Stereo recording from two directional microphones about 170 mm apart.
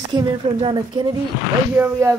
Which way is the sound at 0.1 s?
30° right (ahead or behind).